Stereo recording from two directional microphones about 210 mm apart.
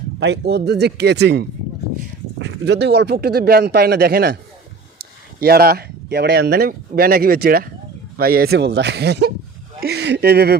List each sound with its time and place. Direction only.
0.2 s speech: 55° right (ahead or behind)